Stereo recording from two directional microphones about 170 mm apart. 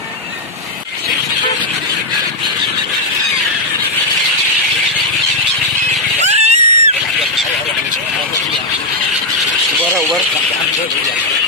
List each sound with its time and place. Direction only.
6.2 s screaming: 40° right (ahead or behind)